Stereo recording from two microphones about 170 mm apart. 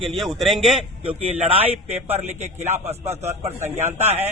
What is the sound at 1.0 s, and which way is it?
A man's voice, 35° right (ahead or behind).